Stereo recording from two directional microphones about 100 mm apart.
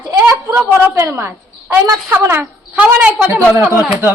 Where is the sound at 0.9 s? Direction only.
25° right (ahead or behind).